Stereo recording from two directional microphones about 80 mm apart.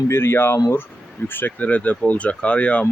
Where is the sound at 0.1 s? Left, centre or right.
Left.